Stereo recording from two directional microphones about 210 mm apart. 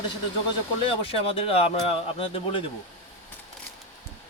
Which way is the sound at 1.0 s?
25° left (ahead or behind).